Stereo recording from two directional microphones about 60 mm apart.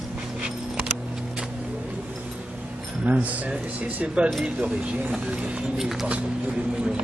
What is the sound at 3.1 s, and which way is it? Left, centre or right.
Speech, right.